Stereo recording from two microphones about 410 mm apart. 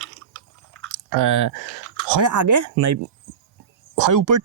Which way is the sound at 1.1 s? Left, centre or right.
Right.